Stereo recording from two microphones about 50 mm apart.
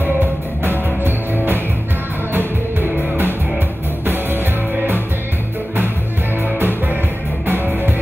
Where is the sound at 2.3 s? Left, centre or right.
Right.